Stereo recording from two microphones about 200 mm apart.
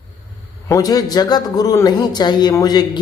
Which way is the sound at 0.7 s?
15° left (ahead or behind).